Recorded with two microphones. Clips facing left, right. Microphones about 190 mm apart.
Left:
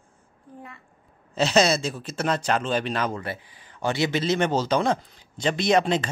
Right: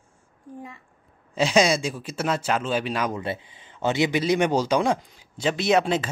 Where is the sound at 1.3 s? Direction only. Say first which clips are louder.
Even; 10° right (ahead or behind).